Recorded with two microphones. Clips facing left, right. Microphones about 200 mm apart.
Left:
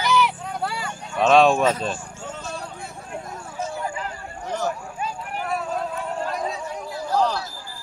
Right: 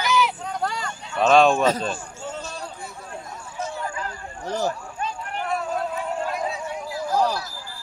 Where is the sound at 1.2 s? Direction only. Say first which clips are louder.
Even; centre (ahead or behind).